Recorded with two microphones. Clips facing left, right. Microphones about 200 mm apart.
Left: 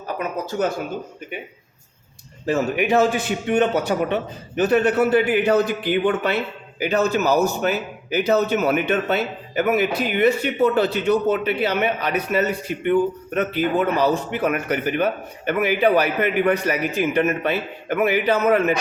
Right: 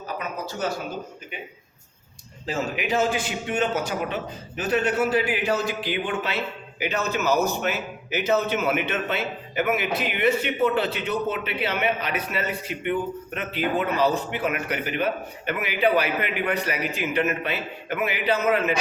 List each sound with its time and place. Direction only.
0.2 s a man's voice: 50° left (ahead or behind)
2.5 s a man's voice: 65° left (ahead or behind)
6.9 s a man's voice: 40° left (ahead or behind)